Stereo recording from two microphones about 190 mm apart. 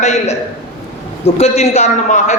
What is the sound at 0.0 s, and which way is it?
A man's voice, 35° left (ahead or behind).